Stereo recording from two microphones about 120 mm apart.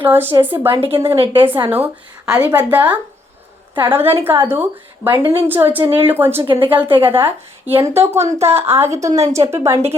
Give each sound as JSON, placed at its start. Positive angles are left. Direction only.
{"t": 0.0, "sound": "speech", "side_deg": -15}
{"t": 0.8, "sound": "speech", "side_deg": -50}
{"t": 1.6, "sound": "a woman's voice", "side_deg": -15}
{"t": 5.2, "sound": "speech", "side_deg": -50}
{"t": 5.5, "sound": "speech", "side_deg": -15}
{"t": 6.4, "sound": "speech", "side_deg": -45}
{"t": 7.0, "sound": "speech", "side_deg": -20}
{"t": 8.2, "sound": "speech", "side_deg": -60}
{"t": 8.5, "sound": "speech", "side_deg": -20}
{"t": 9.0, "sound": "a woman's voice", "side_deg": -65}
{"t": 9.4, "sound": "speech", "side_deg": -25}